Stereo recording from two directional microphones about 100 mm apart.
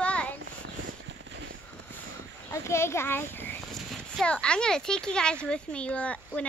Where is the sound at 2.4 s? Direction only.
25° left (ahead or behind).